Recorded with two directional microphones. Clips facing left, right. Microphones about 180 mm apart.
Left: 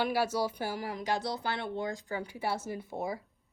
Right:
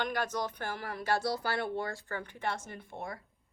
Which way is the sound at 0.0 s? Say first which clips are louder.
Left 4 dB; 5° left (ahead or behind).